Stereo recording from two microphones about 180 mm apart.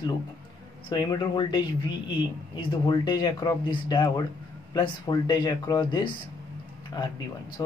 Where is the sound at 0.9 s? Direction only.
25° left (ahead or behind).